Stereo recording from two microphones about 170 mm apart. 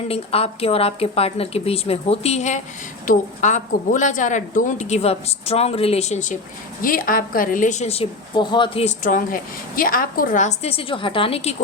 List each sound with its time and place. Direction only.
0.1 s a woman's voice: 35° left (ahead or behind)
6.8 s a woman's voice: 55° left (ahead or behind); by 11.5 s 35° left (ahead or behind)